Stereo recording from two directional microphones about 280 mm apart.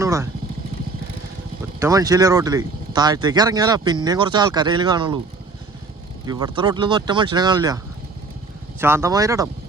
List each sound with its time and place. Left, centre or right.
0.0 s vehicle: centre
1.8 s speech: centre
6.2 s speech: centre
8.8 s speech: centre